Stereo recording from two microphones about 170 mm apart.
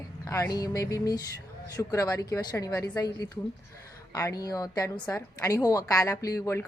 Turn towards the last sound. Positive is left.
turn(degrees=15)  # may be behind; listen again after turning